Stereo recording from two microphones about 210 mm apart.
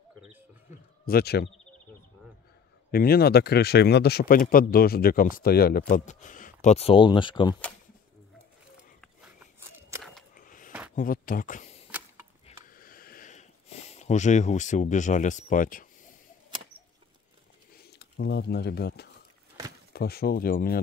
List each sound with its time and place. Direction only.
1.0 s speech: 50° left (ahead or behind)
2.9 s speech: 45° left (ahead or behind); by 7.5 s 20° left (ahead or behind)
10.3 s a sound: 40° left (ahead or behind)
11.0 s speech: 40° left (ahead or behind)
12.4 s a sound: 40° left (ahead or behind)
17.8 s speech: 50° left (ahead or behind)